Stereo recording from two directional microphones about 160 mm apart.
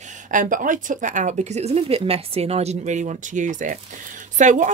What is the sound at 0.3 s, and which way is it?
A woman's voice, 55° right (ahead or behind).